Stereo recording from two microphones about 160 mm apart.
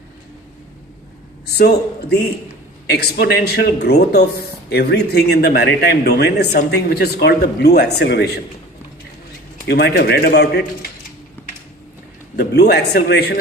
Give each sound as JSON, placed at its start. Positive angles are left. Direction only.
{"t": 1.5, "sound": "a man's voice", "side_deg": 90}
{"t": 9.6, "sound": "a man's voice", "side_deg": 90}
{"t": 12.4, "sound": "a man's voice", "side_deg": 90}